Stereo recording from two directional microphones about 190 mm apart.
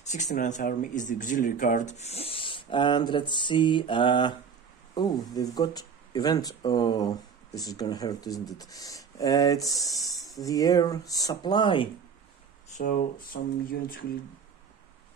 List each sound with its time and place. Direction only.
0.0 s speech: 40° left (ahead or behind)
12.6 s speech: 40° left (ahead or behind)